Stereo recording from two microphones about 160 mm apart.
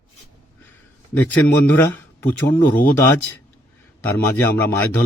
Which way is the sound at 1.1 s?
10° left (ahead or behind).